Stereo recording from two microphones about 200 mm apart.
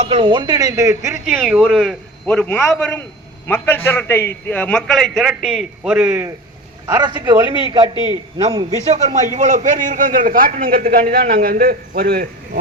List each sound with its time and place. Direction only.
0.0 s speech: 25° right (ahead or behind)
1.2 s a man's voice: centre (ahead or behind)
6.8 s a man's voice: 20° right (ahead or behind); by 12.3 s 50° right (ahead or behind)